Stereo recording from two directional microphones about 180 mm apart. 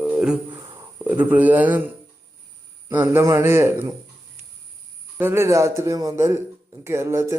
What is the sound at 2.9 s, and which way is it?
Speech, 10° right (ahead or behind).